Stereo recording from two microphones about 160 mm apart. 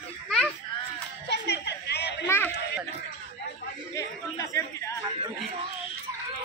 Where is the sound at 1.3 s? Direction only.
90° left.